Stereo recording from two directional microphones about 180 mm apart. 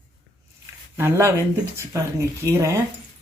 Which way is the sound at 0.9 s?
15° right (ahead or behind).